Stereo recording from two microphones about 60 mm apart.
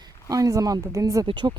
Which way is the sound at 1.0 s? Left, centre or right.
Right.